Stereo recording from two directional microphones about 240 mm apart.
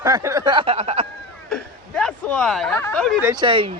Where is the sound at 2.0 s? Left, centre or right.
Centre.